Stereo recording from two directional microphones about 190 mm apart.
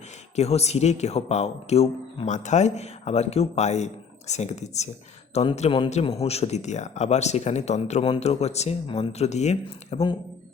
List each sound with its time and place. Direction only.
0.3 s speech: 35° left (ahead or behind)